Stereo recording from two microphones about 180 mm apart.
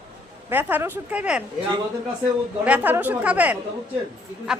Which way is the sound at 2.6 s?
10° right (ahead or behind).